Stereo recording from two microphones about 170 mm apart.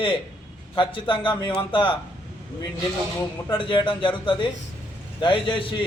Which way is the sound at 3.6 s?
30° left (ahead or behind).